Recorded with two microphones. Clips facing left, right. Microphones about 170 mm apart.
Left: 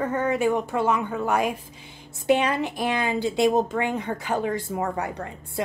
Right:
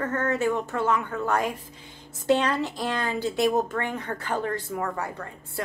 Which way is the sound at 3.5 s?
30° left (ahead or behind).